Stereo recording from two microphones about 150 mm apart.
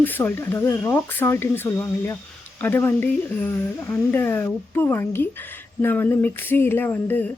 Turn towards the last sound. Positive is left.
turn(degrees=15)  # may be behind; listen again after turning